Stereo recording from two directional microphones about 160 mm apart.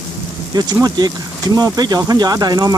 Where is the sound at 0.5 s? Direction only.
25° right (ahead or behind).